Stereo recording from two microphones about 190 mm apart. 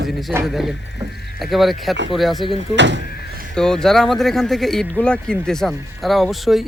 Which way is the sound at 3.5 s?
5° left (ahead or behind).